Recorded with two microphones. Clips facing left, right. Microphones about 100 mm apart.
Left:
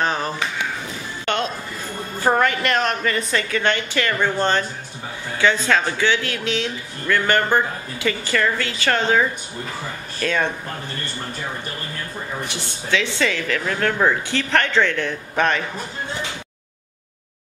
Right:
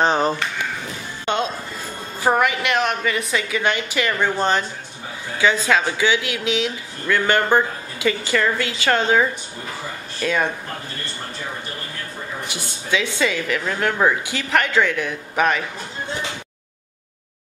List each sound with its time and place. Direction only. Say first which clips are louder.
0.0 s a sound: right 4 dB; 25° right (ahead or behind)
1.2 s music: right 1 dB; 15° right (ahead or behind)
2.1 s speech: even; 10° right (ahead or behind)
13.2 s speech: even; 15° right (ahead or behind)